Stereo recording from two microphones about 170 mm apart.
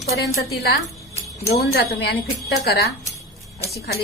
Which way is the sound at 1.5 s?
70° left (ahead or behind).